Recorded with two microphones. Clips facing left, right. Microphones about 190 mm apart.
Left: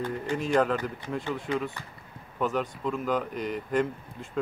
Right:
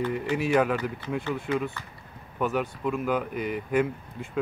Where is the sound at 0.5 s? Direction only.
5° right (ahead or behind).